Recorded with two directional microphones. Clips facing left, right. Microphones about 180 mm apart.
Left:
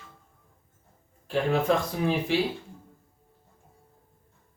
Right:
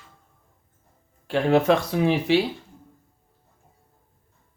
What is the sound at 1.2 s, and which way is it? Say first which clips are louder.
Speech: right 5 dB; 80° right.